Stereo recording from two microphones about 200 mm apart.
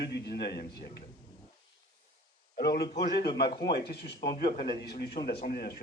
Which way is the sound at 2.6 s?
50° left (ahead or behind).